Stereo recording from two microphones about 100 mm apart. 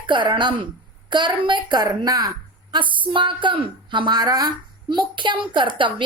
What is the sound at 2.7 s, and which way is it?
A woman's voice, 55° right (ahead or behind).